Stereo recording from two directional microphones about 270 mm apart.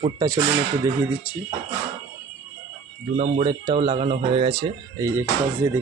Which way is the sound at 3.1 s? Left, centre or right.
Right.